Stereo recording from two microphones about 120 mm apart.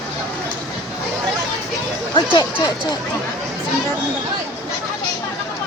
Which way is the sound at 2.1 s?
40° left (ahead or behind).